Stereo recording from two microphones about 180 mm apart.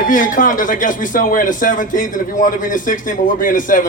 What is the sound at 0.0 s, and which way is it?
Speech, 50° left (ahead or behind).